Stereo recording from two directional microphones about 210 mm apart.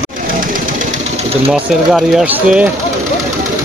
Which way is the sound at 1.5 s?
Centre (ahead or behind).